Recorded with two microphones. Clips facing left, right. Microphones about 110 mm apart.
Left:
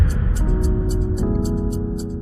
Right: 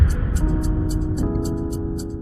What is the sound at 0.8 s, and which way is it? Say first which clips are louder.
Music: left 1 dB; centre (ahead or behind).